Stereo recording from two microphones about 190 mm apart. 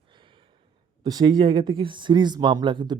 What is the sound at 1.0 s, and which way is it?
Speech, 20° right (ahead or behind).